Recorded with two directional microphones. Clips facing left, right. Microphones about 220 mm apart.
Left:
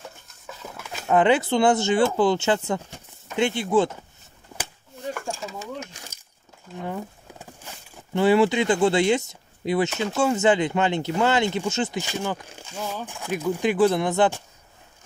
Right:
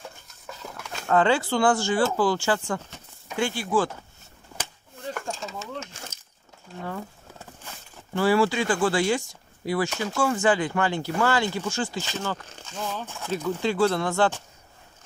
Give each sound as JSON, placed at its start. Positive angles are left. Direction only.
{"t": 0.0, "sound": "stir", "side_deg": 0}
{"t": 1.0, "sound": "speech", "side_deg": 20}
{"t": 5.3, "sound": "a sound", "side_deg": 15}
{"t": 8.1, "sound": "speech", "side_deg": 20}